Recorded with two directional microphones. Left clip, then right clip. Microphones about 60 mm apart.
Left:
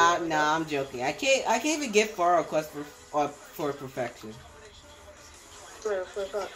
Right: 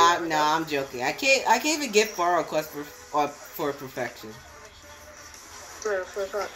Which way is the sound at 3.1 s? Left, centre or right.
Left.